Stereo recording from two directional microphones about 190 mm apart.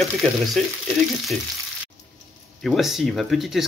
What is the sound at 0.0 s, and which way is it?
Speech, centre (ahead or behind).